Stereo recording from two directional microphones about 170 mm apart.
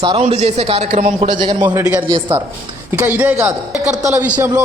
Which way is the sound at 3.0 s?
10° right (ahead or behind).